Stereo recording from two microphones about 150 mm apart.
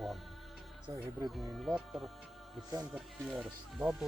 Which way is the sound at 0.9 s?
20° right (ahead or behind).